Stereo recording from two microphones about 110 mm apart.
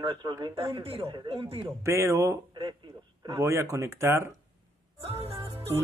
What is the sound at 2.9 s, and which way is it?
Speech, 45° right (ahead or behind).